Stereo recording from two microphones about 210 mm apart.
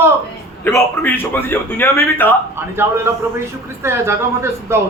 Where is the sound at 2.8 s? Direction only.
10° right (ahead or behind).